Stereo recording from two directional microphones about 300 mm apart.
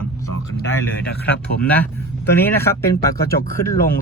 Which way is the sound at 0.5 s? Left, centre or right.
Left.